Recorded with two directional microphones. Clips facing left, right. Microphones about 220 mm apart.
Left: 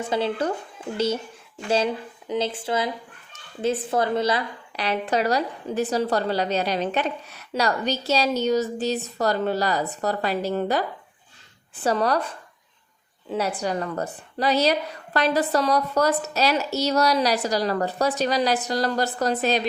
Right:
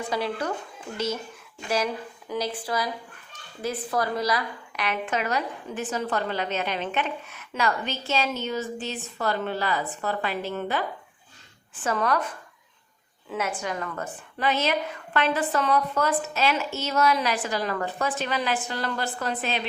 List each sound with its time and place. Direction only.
0.1 s a woman's voice: 30° left (ahead or behind)
13.6 s a woman's voice: 35° left (ahead or behind)